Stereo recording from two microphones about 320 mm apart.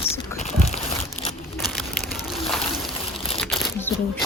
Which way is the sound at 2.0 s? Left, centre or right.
Left.